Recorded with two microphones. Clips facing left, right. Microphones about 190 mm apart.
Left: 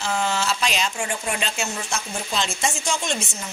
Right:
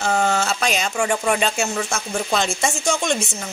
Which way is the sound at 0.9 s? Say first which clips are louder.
Right 7 dB; 70° right (ahead or behind).